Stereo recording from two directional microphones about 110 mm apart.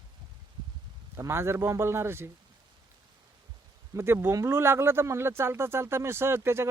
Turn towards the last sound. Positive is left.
turn(degrees=-20)  # may be behind; listen again after turning